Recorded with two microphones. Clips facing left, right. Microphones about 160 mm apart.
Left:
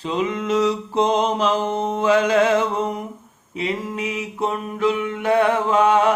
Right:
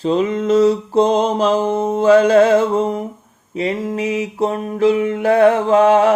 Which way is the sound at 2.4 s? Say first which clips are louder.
Right 6 dB; 45° right (ahead or behind).